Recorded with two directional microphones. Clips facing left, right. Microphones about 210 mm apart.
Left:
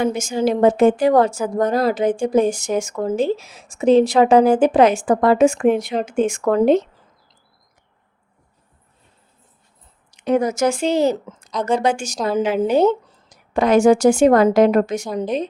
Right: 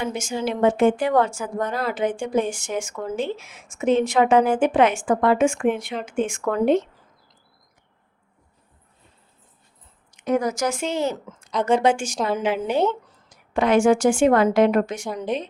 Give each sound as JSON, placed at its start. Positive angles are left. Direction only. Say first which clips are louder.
{"t": 0.0, "sound": "a woman's voice", "louder": "left 7 dB", "side_deg": 40}
{"t": 10.1, "sound": "a woman's voice", "louder": "left 4 dB", "side_deg": 30}